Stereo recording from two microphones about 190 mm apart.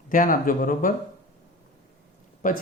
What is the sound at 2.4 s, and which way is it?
Speech, 45° left (ahead or behind).